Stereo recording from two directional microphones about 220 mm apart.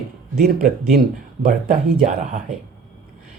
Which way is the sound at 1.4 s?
35° right (ahead or behind).